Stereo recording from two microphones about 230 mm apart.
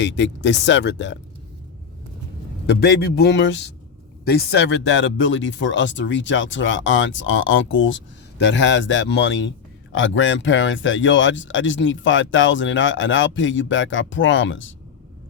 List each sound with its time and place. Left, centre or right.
0.0 s speech: left
2.6 s speech: left